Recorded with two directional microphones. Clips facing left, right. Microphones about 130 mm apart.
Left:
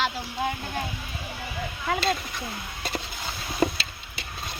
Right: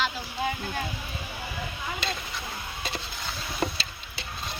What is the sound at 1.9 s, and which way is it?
Speech, 75° left (ahead or behind).